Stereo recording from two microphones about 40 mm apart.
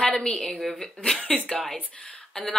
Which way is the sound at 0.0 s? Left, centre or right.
Centre.